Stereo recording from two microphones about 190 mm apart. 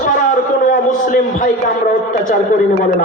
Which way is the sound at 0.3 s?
45° left (ahead or behind).